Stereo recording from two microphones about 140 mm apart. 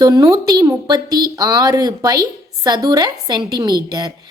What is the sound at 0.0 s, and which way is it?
Speech, 25° right (ahead or behind).